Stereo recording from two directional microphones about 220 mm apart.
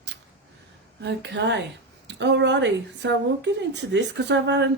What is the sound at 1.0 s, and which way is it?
Speech, 55° right (ahead or behind).